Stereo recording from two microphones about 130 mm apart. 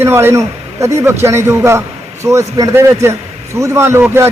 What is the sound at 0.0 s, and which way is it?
A man's voice, 20° right (ahead or behind).